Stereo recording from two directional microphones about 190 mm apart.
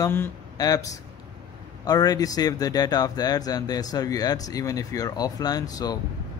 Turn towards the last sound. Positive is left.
turn(degrees=20)  # may be behind; listen again after turning